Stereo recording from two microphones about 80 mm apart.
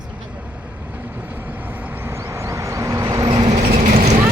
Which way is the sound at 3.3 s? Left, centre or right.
Right.